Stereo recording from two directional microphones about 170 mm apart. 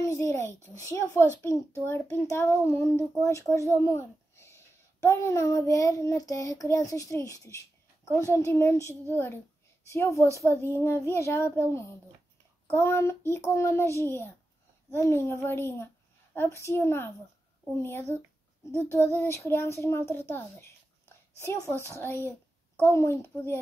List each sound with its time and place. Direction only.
0.0 s a child's voice: 15° left (ahead or behind)
3.7 s a sound: 15° left (ahead or behind)
5.0 s child singing: 15° left (ahead or behind)
8.5 s a child's voice: 15° left (ahead or behind)